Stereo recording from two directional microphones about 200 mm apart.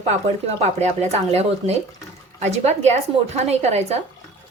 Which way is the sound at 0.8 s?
35° right (ahead or behind).